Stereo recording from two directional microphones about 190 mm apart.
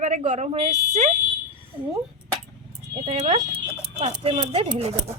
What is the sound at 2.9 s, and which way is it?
Speech, 35° right (ahead or behind).